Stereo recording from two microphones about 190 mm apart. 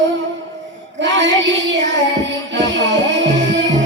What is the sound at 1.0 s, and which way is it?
Child singing, 70° right (ahead or behind).